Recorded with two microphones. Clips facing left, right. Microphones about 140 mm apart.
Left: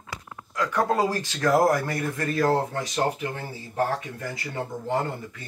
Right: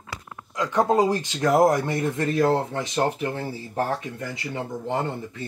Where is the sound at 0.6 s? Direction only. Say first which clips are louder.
Right 3 dB; 20° right (ahead or behind).